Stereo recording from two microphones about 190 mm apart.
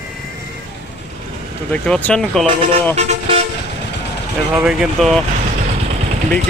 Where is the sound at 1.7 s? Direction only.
5° left (ahead or behind).